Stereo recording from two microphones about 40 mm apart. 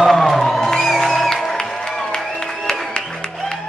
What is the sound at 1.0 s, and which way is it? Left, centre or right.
Music, centre.